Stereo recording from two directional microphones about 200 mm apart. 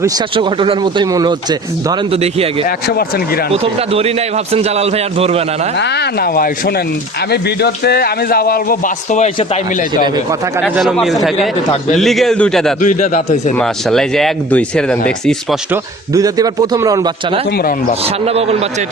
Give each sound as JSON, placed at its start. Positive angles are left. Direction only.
{"t": 0.3, "sound": "speech", "side_deg": -25}
{"t": 3.5, "sound": "a man's voice", "side_deg": -30}
{"t": 5.8, "sound": "speech", "side_deg": 55}
{"t": 10.6, "sound": "speech", "side_deg": 0}
{"t": 11.3, "sound": "a man's voice", "side_deg": 35}
{"t": 11.9, "sound": "speech", "side_deg": 0}
{"t": 12.8, "sound": "a man's voice", "side_deg": 40}
{"t": 13.6, "sound": "speech", "side_deg": 0}
{"t": 15.7, "sound": "a man's voice", "side_deg": -15}
{"t": 18.3, "sound": "a man's voice", "side_deg": -30}